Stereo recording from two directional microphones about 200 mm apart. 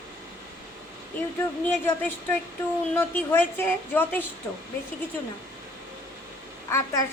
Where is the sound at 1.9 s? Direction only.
10° left (ahead or behind).